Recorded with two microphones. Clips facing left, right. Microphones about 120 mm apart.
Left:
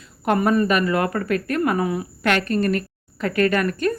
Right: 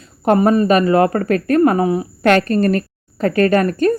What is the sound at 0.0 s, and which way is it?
Speech, 35° right (ahead or behind).